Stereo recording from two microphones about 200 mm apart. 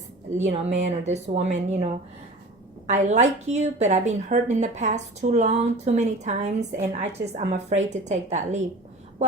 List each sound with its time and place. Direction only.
0.5 s speech: 35° right (ahead or behind)
2.9 s speech: 35° right (ahead or behind)